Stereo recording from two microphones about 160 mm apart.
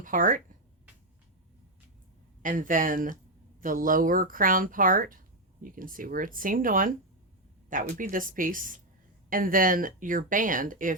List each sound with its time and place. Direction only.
0.0 s speech: 55° right (ahead or behind)
2.4 s speech: 55° right (ahead or behind)